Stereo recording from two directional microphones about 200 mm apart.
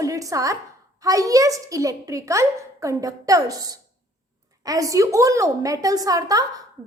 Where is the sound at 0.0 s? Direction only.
15° right (ahead or behind).